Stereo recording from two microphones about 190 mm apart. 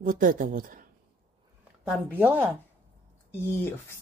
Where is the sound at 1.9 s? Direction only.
10° right (ahead or behind).